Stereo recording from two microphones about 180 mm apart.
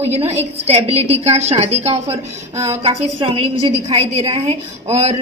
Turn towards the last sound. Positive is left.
turn(degrees=-35)  # may be behind; listen again after turning